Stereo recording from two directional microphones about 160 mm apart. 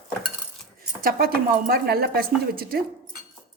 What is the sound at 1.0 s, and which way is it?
Speech, 70° right (ahead or behind).